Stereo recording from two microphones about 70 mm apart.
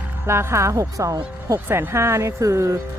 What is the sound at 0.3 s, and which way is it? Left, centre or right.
Speech, right.